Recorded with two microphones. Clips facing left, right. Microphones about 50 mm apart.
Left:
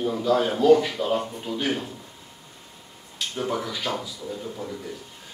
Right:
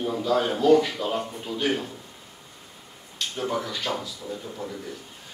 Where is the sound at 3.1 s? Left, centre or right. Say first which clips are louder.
Even; centre.